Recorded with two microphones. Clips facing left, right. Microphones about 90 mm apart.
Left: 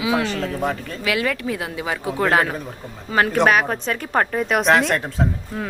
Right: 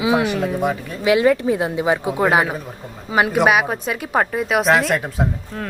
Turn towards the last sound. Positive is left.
turn(degrees=5)  # may be behind; listen again after turning